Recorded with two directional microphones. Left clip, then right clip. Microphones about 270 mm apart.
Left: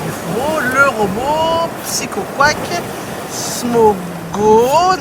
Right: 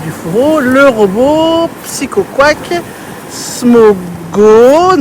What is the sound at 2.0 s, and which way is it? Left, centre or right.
Speech, right.